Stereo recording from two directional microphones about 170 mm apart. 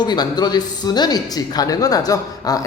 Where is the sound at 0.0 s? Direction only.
25° left (ahead or behind).